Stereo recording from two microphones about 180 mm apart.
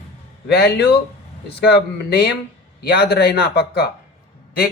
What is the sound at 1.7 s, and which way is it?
A man's voice, 65° left (ahead or behind).